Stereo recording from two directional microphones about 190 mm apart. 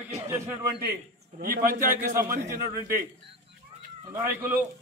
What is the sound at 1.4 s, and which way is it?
A man's voice, 50° right (ahead or behind).